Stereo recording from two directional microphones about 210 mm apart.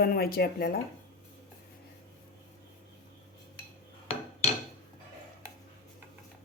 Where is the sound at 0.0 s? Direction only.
45° left (ahead or behind).